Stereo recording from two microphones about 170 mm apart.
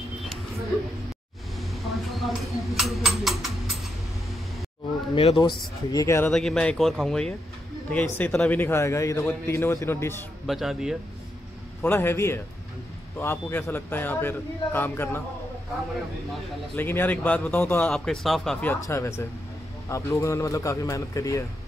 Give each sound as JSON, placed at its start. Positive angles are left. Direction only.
{"t": 0.2, "sound": "a sound", "side_deg": 0}
{"t": 5.1, "sound": "a man's voice", "side_deg": 30}
{"t": 6.3, "sound": "a man's voice", "side_deg": 5}
{"t": 10.4, "sound": "speech", "side_deg": 0}
{"t": 11.8, "sound": "a man's voice", "side_deg": 15}
{"t": 16.7, "sound": "a man's voice", "side_deg": 10}